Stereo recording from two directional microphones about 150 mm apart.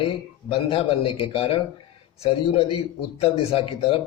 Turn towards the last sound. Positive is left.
turn(degrees=40)  # may be behind; listen again after turning